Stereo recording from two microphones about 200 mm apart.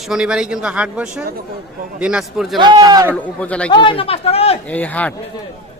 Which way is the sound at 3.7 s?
25° left (ahead or behind).